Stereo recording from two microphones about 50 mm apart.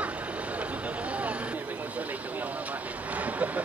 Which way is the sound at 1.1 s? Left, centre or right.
Right.